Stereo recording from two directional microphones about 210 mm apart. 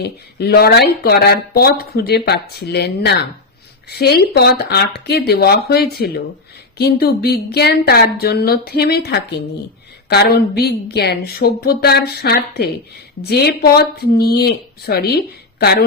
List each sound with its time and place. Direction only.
0.0 s speech: 50° left (ahead or behind)